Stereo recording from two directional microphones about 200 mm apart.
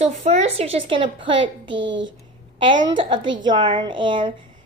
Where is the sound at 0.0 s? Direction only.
35° right (ahead or behind).